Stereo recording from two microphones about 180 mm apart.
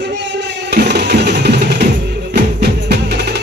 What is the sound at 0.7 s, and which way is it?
Music, 70° right (ahead or behind).